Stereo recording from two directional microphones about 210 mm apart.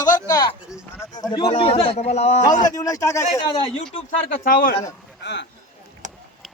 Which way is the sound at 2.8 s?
15° left (ahead or behind).